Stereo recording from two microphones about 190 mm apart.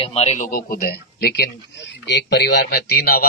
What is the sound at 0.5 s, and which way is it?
Speech, 50° left (ahead or behind).